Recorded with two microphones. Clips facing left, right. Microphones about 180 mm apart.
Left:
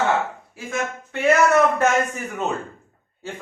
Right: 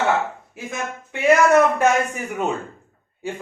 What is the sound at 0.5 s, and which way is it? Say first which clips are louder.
A man's voice: left 6 dB; 20° right (ahead or behind).